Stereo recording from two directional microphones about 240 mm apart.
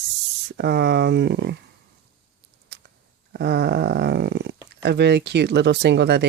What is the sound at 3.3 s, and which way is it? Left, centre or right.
Speech, right.